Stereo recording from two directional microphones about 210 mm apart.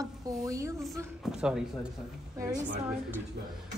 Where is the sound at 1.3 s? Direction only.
5° right (ahead or behind).